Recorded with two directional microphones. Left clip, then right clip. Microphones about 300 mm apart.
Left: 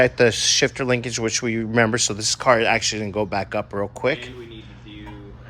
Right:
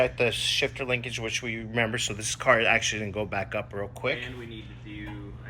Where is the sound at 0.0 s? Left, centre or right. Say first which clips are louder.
Left 8 dB; left.